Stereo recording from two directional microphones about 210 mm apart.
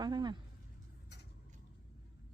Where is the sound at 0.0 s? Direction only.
20° right (ahead or behind).